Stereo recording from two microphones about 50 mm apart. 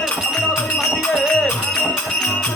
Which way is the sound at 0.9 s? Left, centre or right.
Left.